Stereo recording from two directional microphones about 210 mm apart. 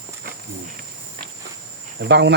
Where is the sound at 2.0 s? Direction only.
55° right (ahead or behind).